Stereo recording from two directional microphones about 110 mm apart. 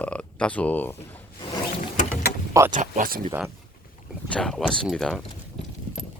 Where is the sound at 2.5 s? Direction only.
30° right (ahead or behind).